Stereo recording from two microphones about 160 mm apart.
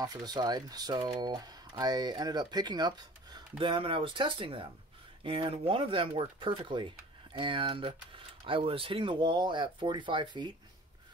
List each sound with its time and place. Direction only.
0.0 s speech: 25° right (ahead or behind)